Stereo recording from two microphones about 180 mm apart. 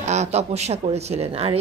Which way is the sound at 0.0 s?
40° right (ahead or behind).